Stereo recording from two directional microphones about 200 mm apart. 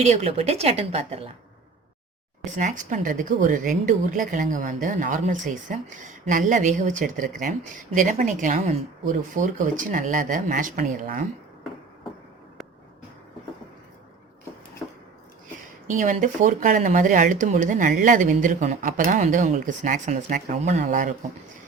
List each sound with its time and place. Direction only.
0.0 s speech: 35° right (ahead or behind)
2.4 s speech: 40° right (ahead or behind)
15.9 s speech: 40° right (ahead or behind)